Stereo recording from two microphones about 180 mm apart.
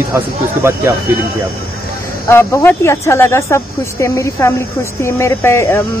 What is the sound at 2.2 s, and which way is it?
Speech, 15° left (ahead or behind).